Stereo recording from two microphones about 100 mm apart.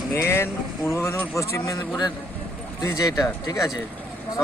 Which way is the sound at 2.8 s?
40° left (ahead or behind).